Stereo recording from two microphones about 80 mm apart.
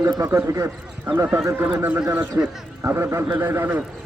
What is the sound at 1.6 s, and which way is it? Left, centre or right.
A man's voice, right.